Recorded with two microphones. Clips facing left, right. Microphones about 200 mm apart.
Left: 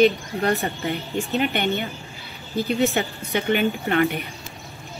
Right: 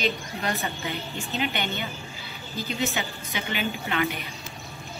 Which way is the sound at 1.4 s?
55° left (ahead or behind).